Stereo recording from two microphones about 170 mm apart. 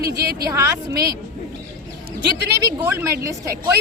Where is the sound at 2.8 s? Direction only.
15° right (ahead or behind).